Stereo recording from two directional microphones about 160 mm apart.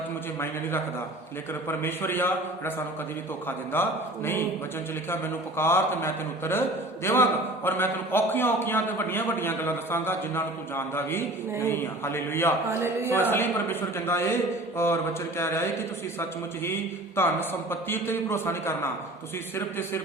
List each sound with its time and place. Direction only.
0.3 s a man's voice: 15° left (ahead or behind)
12.8 s speech: 15° right (ahead or behind)
13.3 s a man's voice: 15° left (ahead or behind)
17.2 s a man's voice: 15° left (ahead or behind)